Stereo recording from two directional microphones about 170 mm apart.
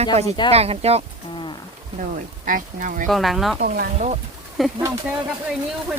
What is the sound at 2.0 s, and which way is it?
Speech, 50° right (ahead or behind).